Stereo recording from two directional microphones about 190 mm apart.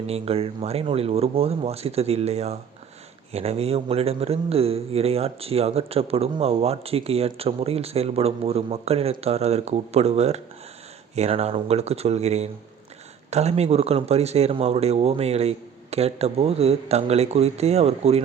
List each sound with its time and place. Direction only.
0.1 s a man's voice: 30° right (ahead or behind)